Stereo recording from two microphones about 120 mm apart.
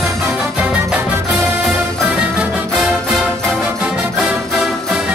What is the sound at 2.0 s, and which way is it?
Music, 5° right (ahead or behind).